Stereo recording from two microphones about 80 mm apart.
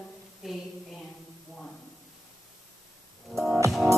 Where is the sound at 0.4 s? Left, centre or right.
Centre.